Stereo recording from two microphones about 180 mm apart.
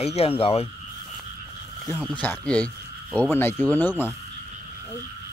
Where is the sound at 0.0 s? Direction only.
35° left (ahead or behind).